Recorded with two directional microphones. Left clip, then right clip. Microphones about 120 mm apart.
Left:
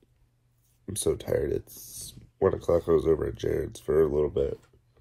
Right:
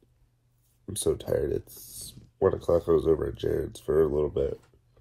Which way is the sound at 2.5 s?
Centre (ahead or behind).